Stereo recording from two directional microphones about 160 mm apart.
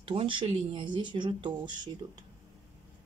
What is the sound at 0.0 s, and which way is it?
Speech, 35° right (ahead or behind).